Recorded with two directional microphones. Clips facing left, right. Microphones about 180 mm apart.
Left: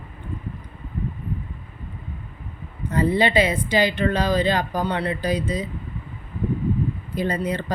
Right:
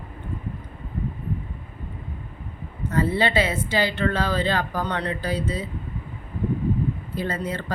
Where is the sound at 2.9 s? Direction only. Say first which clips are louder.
Left 3 dB; 15° left (ahead or behind).